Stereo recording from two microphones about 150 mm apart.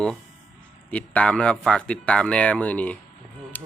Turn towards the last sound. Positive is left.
turn(degrees=10)  # may be behind; listen again after turning